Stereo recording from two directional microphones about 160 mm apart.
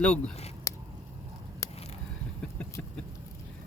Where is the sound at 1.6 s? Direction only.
20° left (ahead or behind).